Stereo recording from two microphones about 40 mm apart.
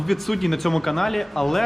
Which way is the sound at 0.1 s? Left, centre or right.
Centre.